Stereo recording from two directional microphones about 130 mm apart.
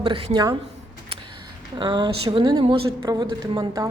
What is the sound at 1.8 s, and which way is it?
A woman's voice, 35° right (ahead or behind).